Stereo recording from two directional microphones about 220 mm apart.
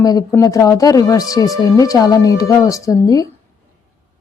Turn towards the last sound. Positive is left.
turn(degrees=15)  # may be behind; listen again after turning